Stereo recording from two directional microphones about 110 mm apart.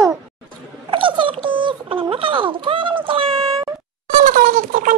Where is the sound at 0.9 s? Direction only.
50° right (ahead or behind).